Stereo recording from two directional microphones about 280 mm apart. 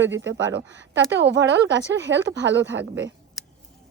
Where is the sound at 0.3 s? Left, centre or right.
Right.